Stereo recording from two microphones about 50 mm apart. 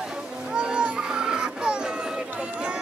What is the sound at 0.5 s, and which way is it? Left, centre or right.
Children playing, centre.